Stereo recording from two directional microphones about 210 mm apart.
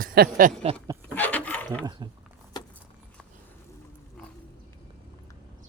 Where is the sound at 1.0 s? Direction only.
10° left (ahead or behind).